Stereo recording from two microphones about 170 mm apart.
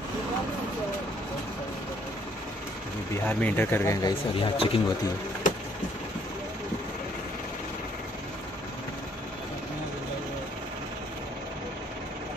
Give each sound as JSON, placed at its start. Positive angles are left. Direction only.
{"t": 3.3, "sound": "speech", "side_deg": 10}
{"t": 4.4, "sound": "speech", "side_deg": 30}